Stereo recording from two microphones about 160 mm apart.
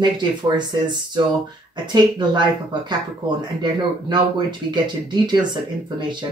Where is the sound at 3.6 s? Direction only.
30° right (ahead or behind).